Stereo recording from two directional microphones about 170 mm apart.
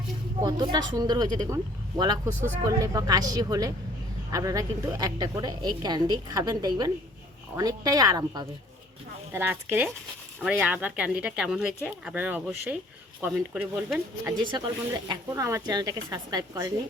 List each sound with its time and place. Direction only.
0.4 s a woman's voice: 25° right (ahead or behind)
14.5 s a woman's voice: 25° right (ahead or behind)